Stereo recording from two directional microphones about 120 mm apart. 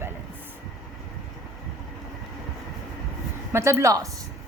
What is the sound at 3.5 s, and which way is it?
Speech, 25° right (ahead or behind).